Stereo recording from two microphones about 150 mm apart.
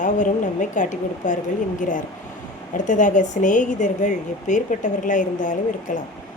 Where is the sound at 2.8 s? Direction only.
60° left (ahead or behind).